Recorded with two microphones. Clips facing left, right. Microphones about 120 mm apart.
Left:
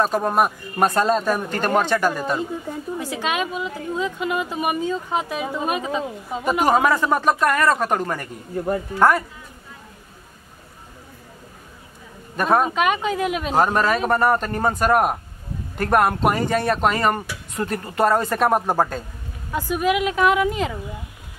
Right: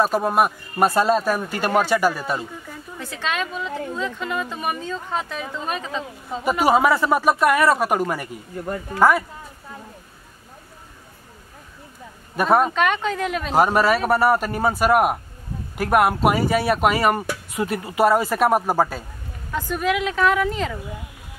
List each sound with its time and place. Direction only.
0.0 s speech: 5° right (ahead or behind)
3.0 s speech: 10° left (ahead or behind)
6.6 s speech: 5° right (ahead or behind)
12.4 s speech: 5° right (ahead or behind)
13.6 s speech: 10° right (ahead or behind)
19.5 s speech: 10° left (ahead or behind)